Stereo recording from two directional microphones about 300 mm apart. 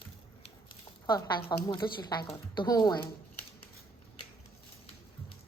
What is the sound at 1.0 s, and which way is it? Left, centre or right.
A woman's voice, centre.